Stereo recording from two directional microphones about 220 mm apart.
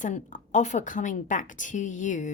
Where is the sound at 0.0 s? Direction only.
35° left (ahead or behind).